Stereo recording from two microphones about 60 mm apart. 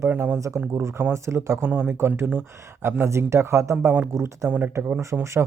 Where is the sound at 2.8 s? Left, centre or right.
Right.